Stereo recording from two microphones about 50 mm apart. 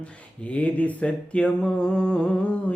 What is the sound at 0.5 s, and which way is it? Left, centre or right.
Mantra, left.